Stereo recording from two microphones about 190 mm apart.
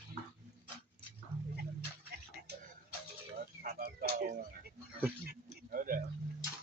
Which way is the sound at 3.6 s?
50° right (ahead or behind).